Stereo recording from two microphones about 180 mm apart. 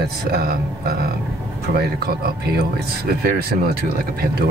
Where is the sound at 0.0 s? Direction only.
60° right (ahead or behind).